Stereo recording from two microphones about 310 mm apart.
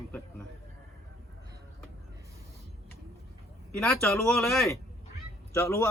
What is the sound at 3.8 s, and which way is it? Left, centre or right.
Speech, centre.